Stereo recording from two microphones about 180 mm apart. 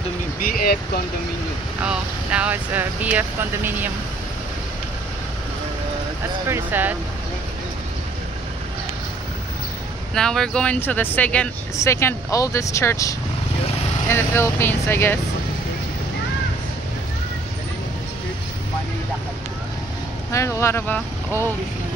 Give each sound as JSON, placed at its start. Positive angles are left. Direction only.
{"t": 0.4, "sound": "speech", "side_deg": 55}
{"t": 1.8, "sound": "speech", "side_deg": -5}
{"t": 6.4, "sound": "speech", "side_deg": -10}
{"t": 10.1, "sound": "speech", "side_deg": 5}
{"t": 20.2, "sound": "speech", "side_deg": 15}